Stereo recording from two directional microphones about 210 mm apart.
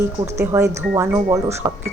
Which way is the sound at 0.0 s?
15° right (ahead or behind).